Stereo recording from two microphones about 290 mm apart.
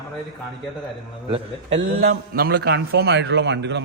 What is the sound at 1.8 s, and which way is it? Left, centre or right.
A man's voice, right.